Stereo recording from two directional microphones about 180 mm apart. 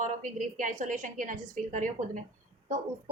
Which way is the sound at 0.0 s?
45° right (ahead or behind).